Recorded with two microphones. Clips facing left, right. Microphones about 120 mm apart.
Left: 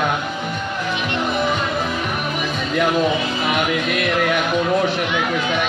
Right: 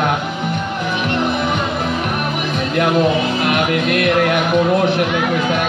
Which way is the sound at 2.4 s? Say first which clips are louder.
Right 1 dB; 60° right (ahead or behind).